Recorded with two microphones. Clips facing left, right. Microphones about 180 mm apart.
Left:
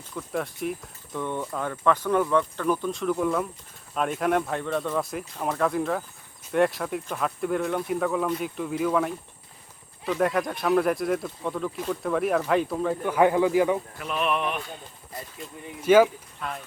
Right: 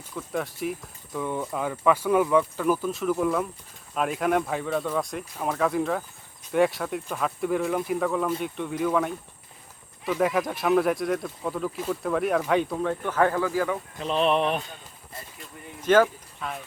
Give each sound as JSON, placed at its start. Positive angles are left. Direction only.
{"t": 0.1, "sound": "speech", "side_deg": 0}
{"t": 14.0, "sound": "speech", "side_deg": -30}
{"t": 15.8, "sound": "speech", "side_deg": 10}